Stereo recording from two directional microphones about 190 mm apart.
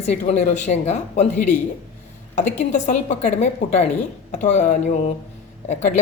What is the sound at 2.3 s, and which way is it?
A woman's voice, 40° left (ahead or behind).